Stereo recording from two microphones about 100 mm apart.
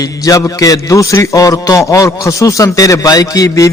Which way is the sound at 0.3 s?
35° left (ahead or behind).